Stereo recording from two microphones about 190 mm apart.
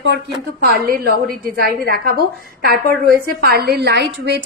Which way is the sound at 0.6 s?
55° right (ahead or behind).